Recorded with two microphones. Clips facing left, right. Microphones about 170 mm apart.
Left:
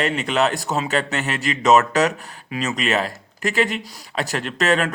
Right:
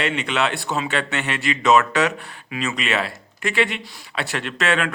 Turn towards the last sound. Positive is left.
turn(degrees=40)  # may be behind; listen again after turning